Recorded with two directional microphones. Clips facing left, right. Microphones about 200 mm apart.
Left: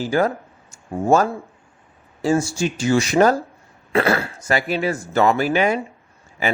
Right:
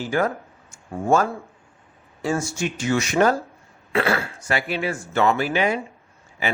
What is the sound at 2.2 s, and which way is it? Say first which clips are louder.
Speech: left 5 dB; 30° left (ahead or behind).